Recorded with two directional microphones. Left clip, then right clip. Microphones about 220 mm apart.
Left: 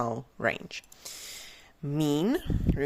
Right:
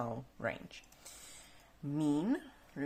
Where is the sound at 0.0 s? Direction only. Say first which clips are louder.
Left 10 dB; 40° left (ahead or behind).